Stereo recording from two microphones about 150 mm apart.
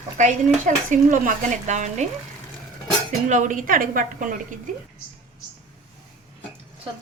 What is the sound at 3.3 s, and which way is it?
Speech, 60° right (ahead or behind).